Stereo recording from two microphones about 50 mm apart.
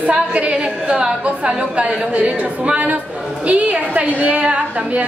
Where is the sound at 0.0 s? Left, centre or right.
Right.